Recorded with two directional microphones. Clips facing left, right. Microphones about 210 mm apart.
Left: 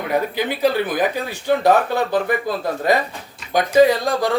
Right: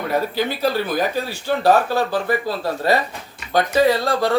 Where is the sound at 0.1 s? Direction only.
15° left (ahead or behind).